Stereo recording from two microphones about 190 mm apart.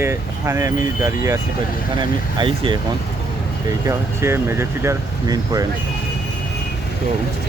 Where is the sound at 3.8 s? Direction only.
15° right (ahead or behind).